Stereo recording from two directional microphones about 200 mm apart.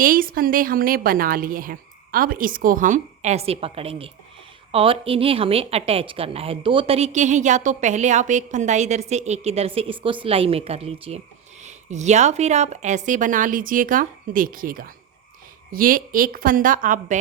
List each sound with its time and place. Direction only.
0.0 s a woman's voice: 45° right (ahead or behind)